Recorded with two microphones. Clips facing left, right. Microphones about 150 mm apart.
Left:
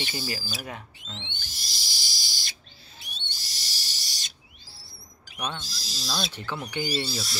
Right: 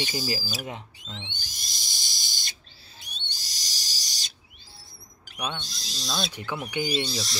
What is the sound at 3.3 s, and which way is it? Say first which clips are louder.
Owl: left 1 dB; 40° right (ahead or behind).